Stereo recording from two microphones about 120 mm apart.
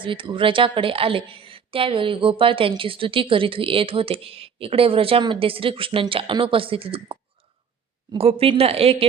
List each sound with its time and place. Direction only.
0.0 s a woman's voice: 45° right (ahead or behind)
8.2 s speech: 55° right (ahead or behind)